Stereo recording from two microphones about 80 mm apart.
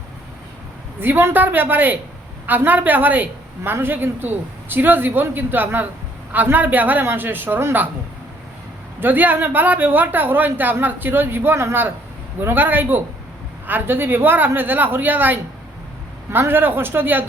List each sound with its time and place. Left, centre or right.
0.9 s speech: right
9.0 s speech: right